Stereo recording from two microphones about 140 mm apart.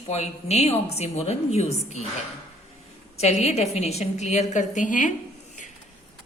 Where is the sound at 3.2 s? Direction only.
50° left (ahead or behind).